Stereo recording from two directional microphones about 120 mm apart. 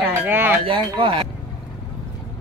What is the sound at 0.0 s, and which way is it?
Speech, 15° right (ahead or behind).